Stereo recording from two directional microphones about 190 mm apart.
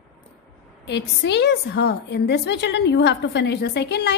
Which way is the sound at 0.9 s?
65° left (ahead or behind).